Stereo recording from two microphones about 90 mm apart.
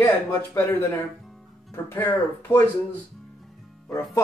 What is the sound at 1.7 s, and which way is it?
Speech, 30° left (ahead or behind).